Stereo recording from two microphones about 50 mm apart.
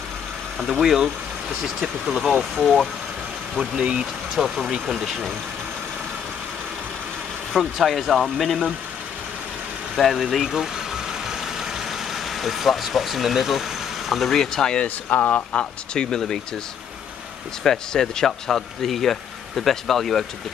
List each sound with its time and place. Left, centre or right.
0.6 s speech: centre
3.7 s speech: centre
7.5 s speech: centre
10.1 s vehicle: centre
15.0 s speech: left
15.9 s speech: centre
17.6 s speech: centre